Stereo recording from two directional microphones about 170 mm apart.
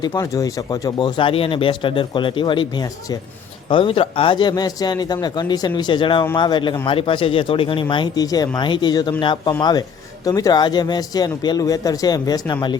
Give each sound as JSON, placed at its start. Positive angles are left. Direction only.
{"t": 0.0, "sound": "speech", "side_deg": 25}